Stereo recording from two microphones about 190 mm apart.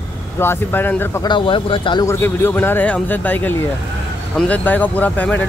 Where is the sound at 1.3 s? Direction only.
25° left (ahead or behind).